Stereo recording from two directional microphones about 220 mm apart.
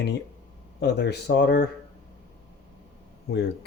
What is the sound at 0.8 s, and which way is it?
Speech, 50° left (ahead or behind).